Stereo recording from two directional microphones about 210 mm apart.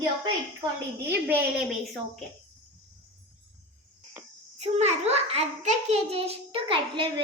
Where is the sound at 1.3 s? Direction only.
10° right (ahead or behind).